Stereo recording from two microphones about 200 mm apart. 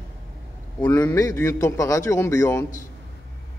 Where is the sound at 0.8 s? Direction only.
10° left (ahead or behind).